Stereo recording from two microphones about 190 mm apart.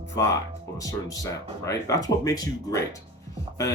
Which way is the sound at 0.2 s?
20° left (ahead or behind).